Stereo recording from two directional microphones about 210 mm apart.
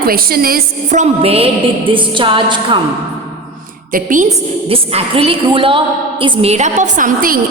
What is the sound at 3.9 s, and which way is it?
A woman's voice, 40° right (ahead or behind).